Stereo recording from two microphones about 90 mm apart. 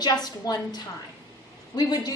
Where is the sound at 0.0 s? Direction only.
50° left (ahead or behind).